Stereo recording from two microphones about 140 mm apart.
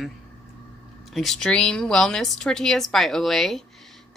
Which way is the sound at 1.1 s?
Centre (ahead or behind).